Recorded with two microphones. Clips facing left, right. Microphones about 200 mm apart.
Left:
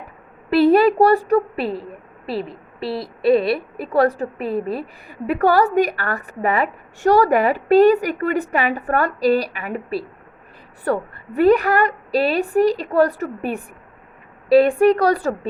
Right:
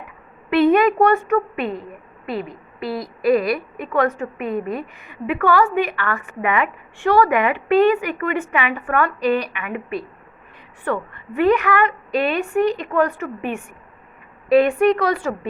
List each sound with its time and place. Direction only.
0.5 s a woman's voice: 35° left (ahead or behind)